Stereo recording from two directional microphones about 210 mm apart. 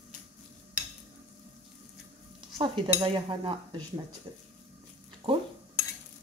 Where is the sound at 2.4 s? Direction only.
25° right (ahead or behind).